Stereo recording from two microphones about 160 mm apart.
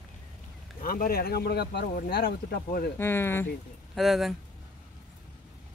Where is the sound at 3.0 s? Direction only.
15° left (ahead or behind).